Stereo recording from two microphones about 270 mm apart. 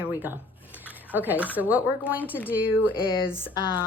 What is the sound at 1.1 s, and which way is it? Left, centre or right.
Speech, centre.